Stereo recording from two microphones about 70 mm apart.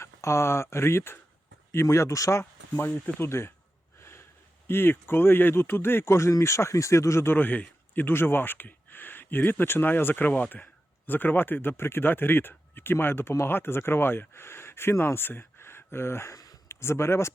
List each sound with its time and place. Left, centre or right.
0.0 s speech: left
2.4 s speech: left